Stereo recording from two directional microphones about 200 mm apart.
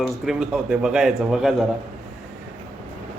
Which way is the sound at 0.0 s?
Centre (ahead or behind).